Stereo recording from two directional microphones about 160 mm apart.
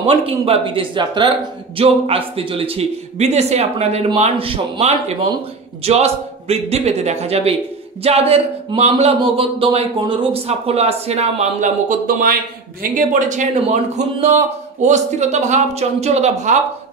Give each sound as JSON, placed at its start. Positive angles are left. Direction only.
{"t": 0.0, "sound": "a man's voice", "side_deg": -35}